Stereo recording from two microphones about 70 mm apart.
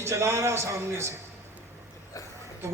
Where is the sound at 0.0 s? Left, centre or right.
Right.